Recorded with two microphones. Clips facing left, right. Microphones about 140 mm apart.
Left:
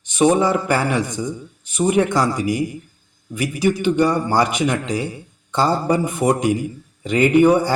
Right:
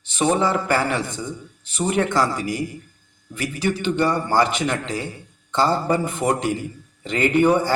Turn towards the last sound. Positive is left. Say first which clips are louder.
# left 4 dB
turn(degrees=15)  # may be behind; listen again after turning